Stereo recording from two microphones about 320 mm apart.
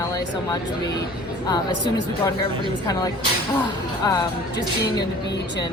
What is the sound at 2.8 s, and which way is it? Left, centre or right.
A man's voice, centre.